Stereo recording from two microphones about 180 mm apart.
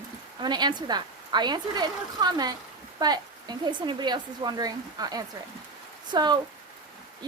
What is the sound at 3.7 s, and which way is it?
Speech, 25° right (ahead or behind).